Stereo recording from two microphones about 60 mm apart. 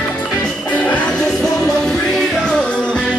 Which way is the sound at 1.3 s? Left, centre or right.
Centre.